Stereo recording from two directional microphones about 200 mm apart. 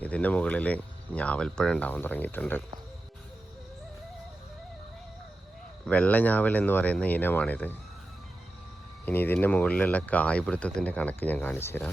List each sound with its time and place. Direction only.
0.0 s speech: 5° left (ahead or behind)
5.8 s speech: 10° left (ahead or behind)
9.0 s speech: 10° left (ahead or behind)